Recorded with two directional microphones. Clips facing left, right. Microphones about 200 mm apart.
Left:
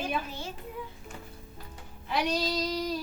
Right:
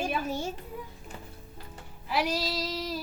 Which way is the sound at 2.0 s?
5° right (ahead or behind).